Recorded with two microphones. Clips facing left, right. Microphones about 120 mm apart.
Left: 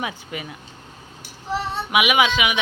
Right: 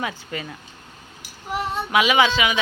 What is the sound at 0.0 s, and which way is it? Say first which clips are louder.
Speech: even; 20° left (ahead or behind).